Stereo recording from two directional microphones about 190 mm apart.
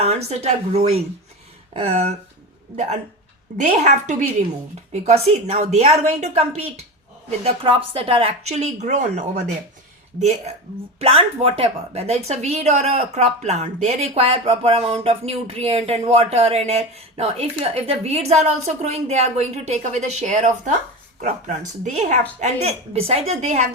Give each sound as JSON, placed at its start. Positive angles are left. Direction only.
{"t": 0.0, "sound": "speech", "side_deg": -35}
{"t": 3.6, "sound": "speech", "side_deg": -40}